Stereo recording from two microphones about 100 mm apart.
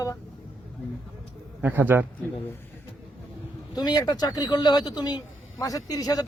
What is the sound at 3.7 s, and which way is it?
Speech, 40° left (ahead or behind).